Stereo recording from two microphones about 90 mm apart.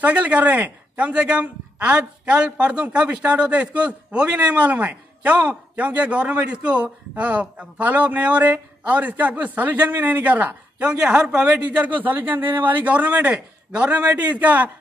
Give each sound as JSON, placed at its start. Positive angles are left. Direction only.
{"t": 0.0, "sound": "a man's voice", "side_deg": -15}